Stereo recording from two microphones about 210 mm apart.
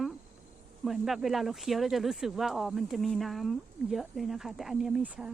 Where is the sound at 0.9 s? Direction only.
Centre (ahead or behind).